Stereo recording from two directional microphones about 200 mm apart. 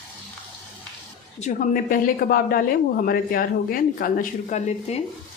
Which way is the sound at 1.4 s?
40° left (ahead or behind).